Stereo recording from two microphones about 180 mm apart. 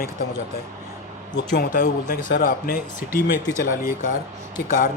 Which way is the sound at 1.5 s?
50° left (ahead or behind).